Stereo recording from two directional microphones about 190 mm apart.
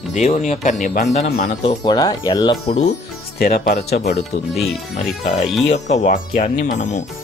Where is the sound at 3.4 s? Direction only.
55° left (ahead or behind).